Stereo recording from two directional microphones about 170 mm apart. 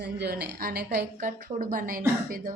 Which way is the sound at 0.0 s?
70° right (ahead or behind).